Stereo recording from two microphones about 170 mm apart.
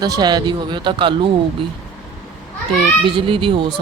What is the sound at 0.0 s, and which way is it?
Speech, 25° right (ahead or behind).